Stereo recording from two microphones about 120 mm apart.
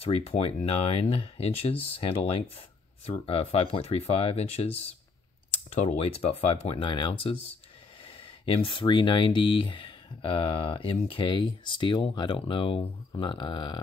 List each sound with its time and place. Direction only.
0.0 s speech: 55° left (ahead or behind)
8.5 s speech: 45° left (ahead or behind)